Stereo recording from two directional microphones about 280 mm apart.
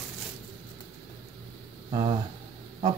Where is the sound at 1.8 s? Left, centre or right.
Centre.